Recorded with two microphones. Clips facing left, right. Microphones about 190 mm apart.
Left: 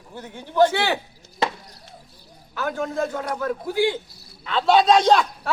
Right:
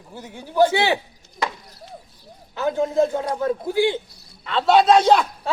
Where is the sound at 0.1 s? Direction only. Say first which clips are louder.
Even; 10° right (ahead or behind).